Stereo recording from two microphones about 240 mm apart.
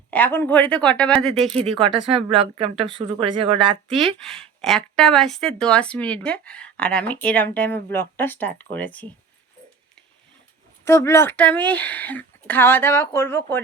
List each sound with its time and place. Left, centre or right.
0.1 s speech: centre
1.5 s speech: right
4.2 s speech: centre
10.8 s a woman's voice: centre